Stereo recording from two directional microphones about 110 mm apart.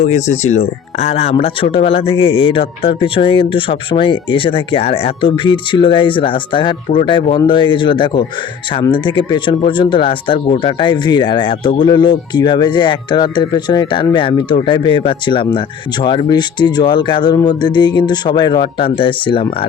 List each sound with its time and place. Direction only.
0.0 s speech: 90° left; by 18.7 s 40° left (ahead or behind)
18.8 s speech: 55° left (ahead or behind)